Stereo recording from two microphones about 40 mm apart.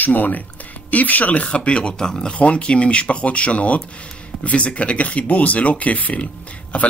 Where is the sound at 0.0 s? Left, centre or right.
Left.